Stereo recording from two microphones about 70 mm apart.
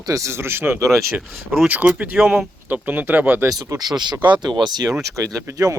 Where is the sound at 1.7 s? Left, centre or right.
Right.